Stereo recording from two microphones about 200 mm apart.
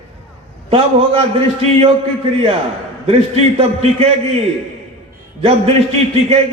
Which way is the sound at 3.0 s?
30° right (ahead or behind).